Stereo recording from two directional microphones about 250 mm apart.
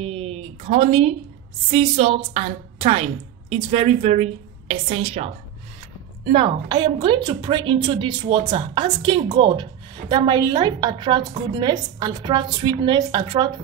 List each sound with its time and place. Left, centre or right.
0.0 s a woman's voice: right